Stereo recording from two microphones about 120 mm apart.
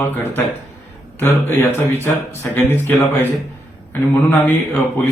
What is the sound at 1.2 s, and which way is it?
A man's voice, 20° left (ahead or behind).